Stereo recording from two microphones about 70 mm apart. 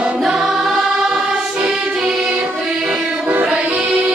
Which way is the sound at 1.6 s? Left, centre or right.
Centre.